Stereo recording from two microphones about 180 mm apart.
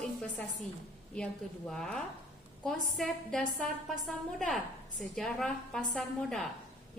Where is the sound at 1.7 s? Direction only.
5° left (ahead or behind).